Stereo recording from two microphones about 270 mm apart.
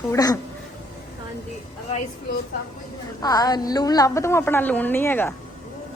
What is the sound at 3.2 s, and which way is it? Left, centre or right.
A woman's voice, centre.